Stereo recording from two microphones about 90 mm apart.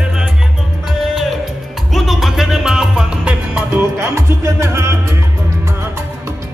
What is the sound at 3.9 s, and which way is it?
Music, 30° right (ahead or behind).